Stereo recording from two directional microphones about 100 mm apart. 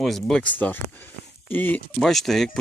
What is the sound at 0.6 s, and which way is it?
Speech, 15° left (ahead or behind).